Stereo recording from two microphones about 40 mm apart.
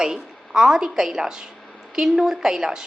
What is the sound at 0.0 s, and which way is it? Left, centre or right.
A woman's voice, centre.